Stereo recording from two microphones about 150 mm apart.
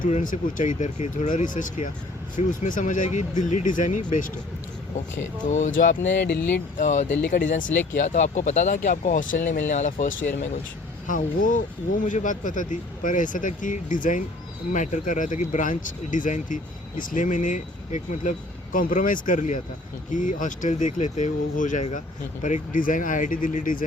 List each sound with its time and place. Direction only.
0.0 s speech: 60° left (ahead or behind)
5.5 s speech: 55° left (ahead or behind); by 6.4 s 85° left
6.7 s speech: 55° left (ahead or behind)